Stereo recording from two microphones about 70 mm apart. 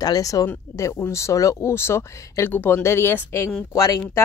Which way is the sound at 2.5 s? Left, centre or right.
Left.